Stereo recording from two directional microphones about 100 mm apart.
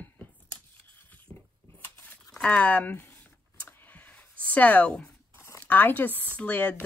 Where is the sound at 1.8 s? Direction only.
20° left (ahead or behind).